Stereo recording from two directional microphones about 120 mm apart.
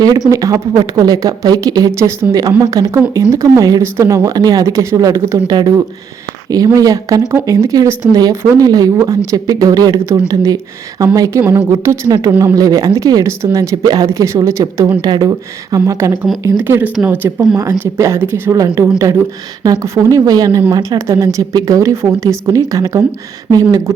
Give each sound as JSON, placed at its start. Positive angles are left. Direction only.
{"t": 0.3, "sound": "speech", "side_deg": -25}
{"t": 1.9, "sound": "speech", "side_deg": -20}
{"t": 12.3, "sound": "speech", "side_deg": -15}
{"t": 12.5, "sound": "speech", "side_deg": -30}
{"t": 16.9, "sound": "speech", "side_deg": -5}
{"t": 17.6, "sound": "speech", "side_deg": -20}